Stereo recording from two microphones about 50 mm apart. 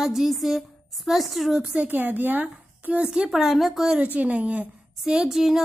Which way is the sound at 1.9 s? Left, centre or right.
Right.